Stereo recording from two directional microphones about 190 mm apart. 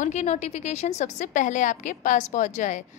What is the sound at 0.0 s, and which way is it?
A woman's voice, 35° left (ahead or behind).